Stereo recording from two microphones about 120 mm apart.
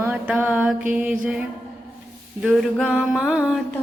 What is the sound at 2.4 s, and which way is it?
Mantra, 5° right (ahead or behind).